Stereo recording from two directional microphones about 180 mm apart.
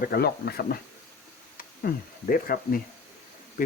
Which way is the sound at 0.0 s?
60° left (ahead or behind).